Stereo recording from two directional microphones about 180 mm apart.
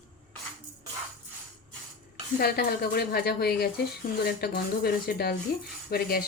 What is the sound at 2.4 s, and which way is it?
Speech, 60° left (ahead or behind).